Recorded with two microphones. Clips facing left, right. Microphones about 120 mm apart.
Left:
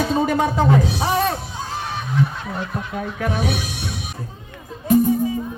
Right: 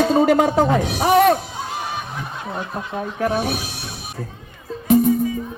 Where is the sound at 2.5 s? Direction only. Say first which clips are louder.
Even; 25° right (ahead or behind); by 3.8 s 40° right (ahead or behind).